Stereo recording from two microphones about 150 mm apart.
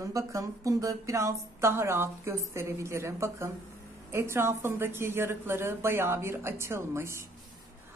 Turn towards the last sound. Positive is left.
turn(degrees=-20)  # may be behind; listen again after turning